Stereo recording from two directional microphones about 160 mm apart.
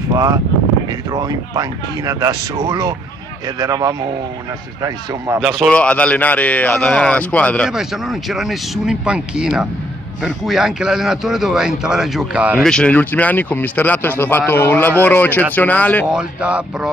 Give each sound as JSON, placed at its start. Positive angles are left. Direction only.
{"t": 0.1, "sound": "speech", "side_deg": -25}
{"t": 5.4, "sound": "a man's voice", "side_deg": 5}
{"t": 16.1, "sound": "speech", "side_deg": -5}